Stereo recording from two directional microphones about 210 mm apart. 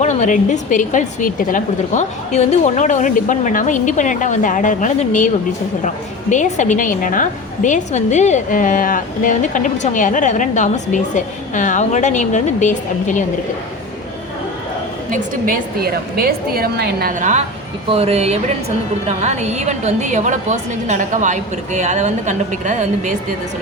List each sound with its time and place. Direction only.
0.0 s a woman's voice: 35° left (ahead or behind)
6.3 s a woman's voice: 35° left (ahead or behind)
15.1 s a woman's voice: 45° right (ahead or behind)